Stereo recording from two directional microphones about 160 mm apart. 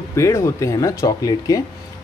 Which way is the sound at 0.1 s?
20° left (ahead or behind).